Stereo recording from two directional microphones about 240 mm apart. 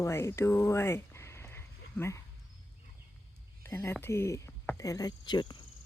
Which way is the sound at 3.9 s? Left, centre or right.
Centre.